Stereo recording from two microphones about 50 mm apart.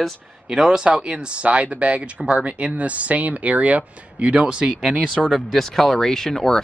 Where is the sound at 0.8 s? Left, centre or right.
Right.